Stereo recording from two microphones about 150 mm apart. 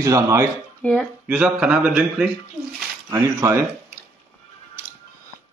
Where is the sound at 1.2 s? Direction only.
10° right (ahead or behind).